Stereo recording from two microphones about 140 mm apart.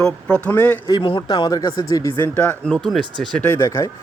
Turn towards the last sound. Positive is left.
turn(degrees=20)  # may be behind; listen again after turning